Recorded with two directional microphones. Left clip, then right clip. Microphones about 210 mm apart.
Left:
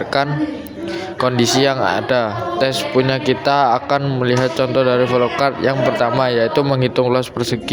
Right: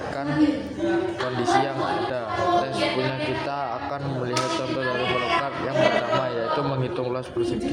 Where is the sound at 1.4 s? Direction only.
45° left (ahead or behind).